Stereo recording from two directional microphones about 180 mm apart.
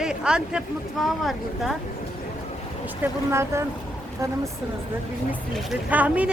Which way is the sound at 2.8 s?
10° right (ahead or behind).